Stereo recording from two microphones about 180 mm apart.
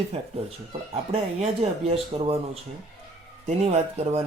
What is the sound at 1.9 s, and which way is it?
Speech, 35° right (ahead or behind).